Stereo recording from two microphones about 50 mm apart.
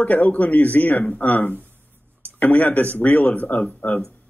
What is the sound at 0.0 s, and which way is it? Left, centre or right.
Speech, left.